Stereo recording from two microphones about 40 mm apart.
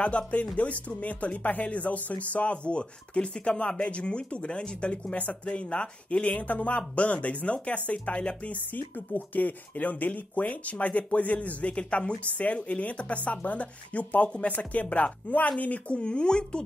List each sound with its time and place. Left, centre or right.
0.2 s speech: left
2.3 s speech: left
6.2 s speech: left
16.0 s speech: left